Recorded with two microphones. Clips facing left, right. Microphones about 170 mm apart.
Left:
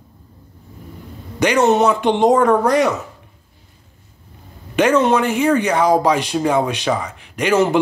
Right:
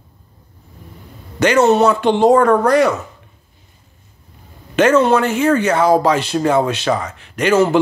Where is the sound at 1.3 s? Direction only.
15° left (ahead or behind).